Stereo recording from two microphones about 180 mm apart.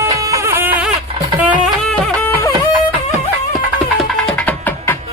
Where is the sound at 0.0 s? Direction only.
15° right (ahead or behind).